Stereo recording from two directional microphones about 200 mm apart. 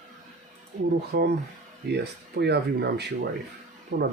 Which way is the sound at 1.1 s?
55° right (ahead or behind).